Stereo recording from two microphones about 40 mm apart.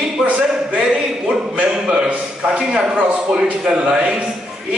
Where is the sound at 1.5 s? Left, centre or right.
Right.